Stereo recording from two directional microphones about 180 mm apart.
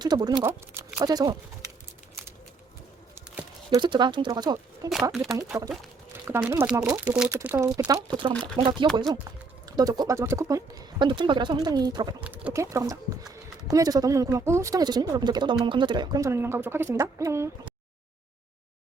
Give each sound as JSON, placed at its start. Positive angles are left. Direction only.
{"t": 0.0, "sound": "speech", "side_deg": -20}
{"t": 3.2, "sound": "a sound", "side_deg": -15}
{"t": 3.8, "sound": "speech", "side_deg": -25}
{"t": 5.1, "sound": "speech", "side_deg": 0}
{"t": 6.2, "sound": "speech", "side_deg": -15}
{"t": 8.0, "sound": "speech", "side_deg": -25}
{"t": 12.2, "sound": "speech", "side_deg": -5}